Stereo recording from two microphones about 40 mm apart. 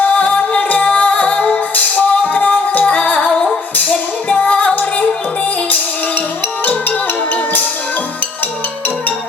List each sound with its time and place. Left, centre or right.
0.0 s music: left
3.2 s music: left
4.3 s music: left
7.3 s music: left